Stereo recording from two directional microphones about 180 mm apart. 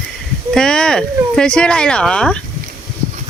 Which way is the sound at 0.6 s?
5° left (ahead or behind).